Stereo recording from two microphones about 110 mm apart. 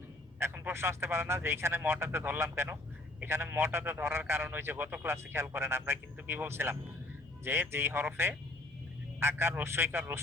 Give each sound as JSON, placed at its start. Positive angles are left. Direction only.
{"t": 0.3, "sound": "a man's voice", "side_deg": -20}